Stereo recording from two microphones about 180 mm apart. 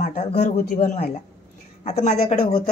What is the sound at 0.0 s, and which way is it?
A man's voice, 40° left (ahead or behind).